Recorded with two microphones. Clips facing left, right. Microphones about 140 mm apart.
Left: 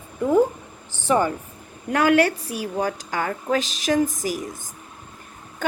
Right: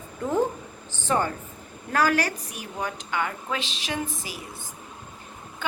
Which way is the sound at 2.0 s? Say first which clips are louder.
Left 6 dB; 25° left (ahead or behind).